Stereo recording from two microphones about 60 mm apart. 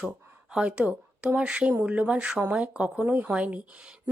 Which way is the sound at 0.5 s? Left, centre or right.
Centre.